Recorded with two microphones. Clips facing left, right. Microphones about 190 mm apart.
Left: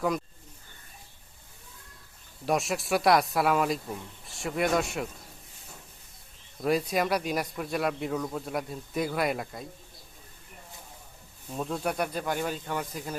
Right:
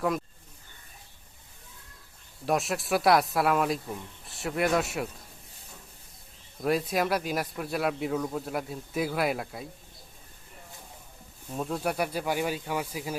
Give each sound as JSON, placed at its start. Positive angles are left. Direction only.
{"t": 2.5, "sound": "a man's voice", "side_deg": 0}
{"t": 6.6, "sound": "a man's voice", "side_deg": 0}
{"t": 11.5, "sound": "speech", "side_deg": -5}